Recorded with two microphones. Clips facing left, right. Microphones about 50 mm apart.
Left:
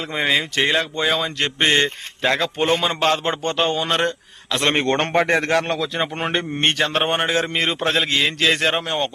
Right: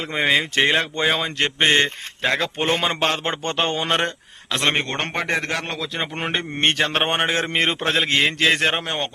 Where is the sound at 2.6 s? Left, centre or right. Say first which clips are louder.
Left 2 dB; right.